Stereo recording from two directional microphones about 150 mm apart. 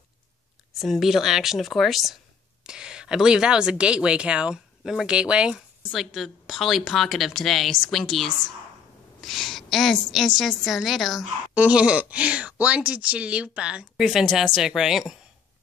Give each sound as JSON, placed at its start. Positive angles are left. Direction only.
{"t": 0.7, "sound": "a woman's voice", "side_deg": 0}